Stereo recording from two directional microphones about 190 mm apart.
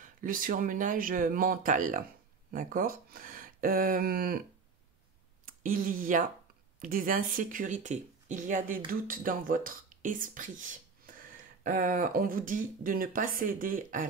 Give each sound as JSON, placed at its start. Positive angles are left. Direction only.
{"t": 0.0, "sound": "speech", "side_deg": -45}